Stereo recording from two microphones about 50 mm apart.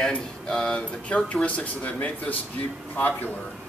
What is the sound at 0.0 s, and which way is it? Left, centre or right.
A man's voice, centre.